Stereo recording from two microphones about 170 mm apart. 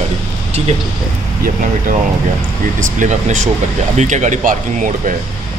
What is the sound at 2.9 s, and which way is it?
Speech, 45° right (ahead or behind).